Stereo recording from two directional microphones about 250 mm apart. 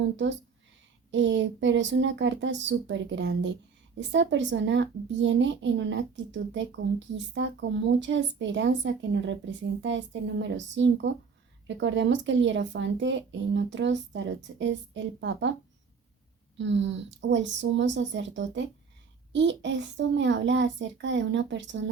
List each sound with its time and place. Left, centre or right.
1.1 s a woman's voice: right
16.6 s a woman's voice: right